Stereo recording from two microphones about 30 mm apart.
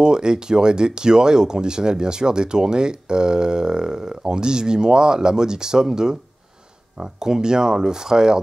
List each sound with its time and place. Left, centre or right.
0.0 s speech: right